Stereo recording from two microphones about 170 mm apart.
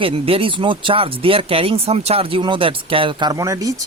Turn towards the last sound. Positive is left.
turn(degrees=-20)  # may be behind; listen again after turning